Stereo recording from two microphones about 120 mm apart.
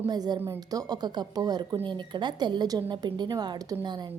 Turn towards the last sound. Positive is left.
turn(degrees=-35)  # may be behind; listen again after turning